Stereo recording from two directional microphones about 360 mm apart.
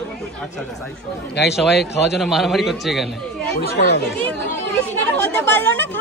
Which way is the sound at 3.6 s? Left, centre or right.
Left.